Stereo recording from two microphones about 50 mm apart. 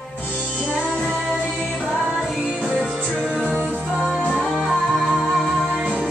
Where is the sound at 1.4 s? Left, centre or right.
Left.